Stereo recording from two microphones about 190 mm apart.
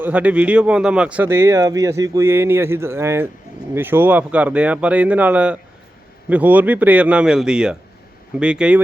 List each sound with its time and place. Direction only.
0.0 s speech: 10° right (ahead or behind)